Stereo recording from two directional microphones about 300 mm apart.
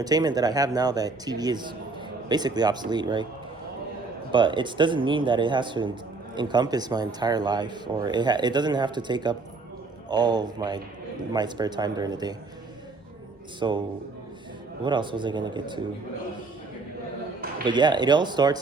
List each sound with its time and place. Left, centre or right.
0.0 s speech: centre
4.3 s speech: centre
13.6 s speech: centre
14.8 s speech: centre
17.7 s speech: centre